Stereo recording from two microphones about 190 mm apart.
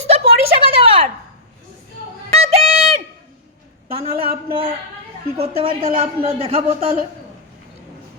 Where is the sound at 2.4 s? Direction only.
35° right (ahead or behind).